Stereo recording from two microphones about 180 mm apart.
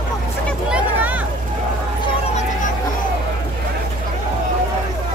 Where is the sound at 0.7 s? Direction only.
10° right (ahead or behind).